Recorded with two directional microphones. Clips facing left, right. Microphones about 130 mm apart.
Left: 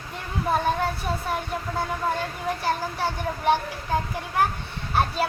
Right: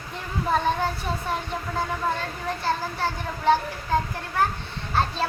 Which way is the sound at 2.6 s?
15° left (ahead or behind).